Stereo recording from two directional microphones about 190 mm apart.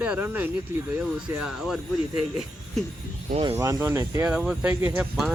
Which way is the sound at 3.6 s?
15° right (ahead or behind).